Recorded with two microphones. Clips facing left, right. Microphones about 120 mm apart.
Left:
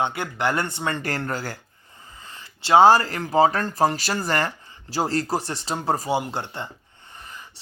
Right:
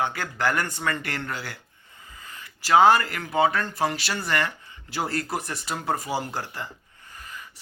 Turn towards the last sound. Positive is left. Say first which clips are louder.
# even
turn(degrees=30)  # may be behind; listen again after turning